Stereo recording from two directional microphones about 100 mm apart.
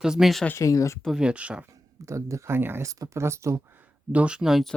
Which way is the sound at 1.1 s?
10° right (ahead or behind).